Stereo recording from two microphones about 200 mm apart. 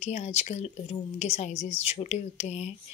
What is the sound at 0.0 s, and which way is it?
A man's voice, 30° left (ahead or behind).